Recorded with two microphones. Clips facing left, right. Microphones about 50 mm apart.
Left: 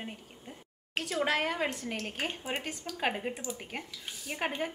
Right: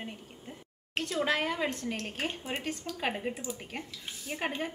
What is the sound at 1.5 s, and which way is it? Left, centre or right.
Speech, centre.